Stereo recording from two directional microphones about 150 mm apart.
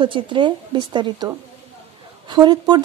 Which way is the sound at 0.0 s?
35° right (ahead or behind).